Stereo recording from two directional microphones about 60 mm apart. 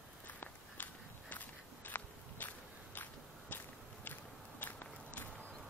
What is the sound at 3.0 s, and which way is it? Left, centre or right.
Biting, left.